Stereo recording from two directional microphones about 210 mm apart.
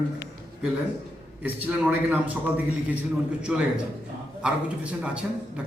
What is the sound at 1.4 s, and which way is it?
A man's voice, 5° right (ahead or behind).